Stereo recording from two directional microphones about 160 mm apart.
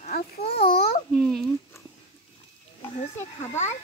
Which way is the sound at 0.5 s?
75° left (ahead or behind).